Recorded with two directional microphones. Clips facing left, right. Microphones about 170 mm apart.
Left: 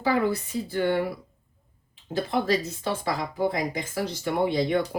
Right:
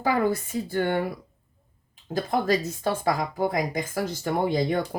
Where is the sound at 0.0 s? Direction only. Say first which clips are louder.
Even; 45° right (ahead or behind).